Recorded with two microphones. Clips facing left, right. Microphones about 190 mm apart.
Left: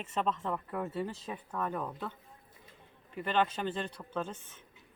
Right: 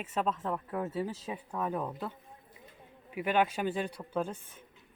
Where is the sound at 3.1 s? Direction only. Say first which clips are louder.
Right 2 dB; 10° right (ahead or behind).